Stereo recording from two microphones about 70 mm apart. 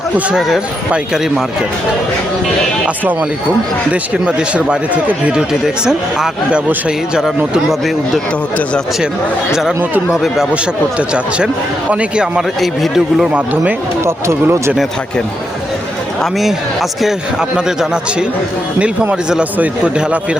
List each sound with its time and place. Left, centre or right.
0.3 s speech: centre
3.0 s speech: right; by 8.2 s centre
10.1 s speech: centre
10.5 s speech: centre
12.5 s speech: centre
13.3 s speech: right
14.0 s speech: right
16.2 s speech: centre
17.7 s speech: centre
19.5 s speech: centre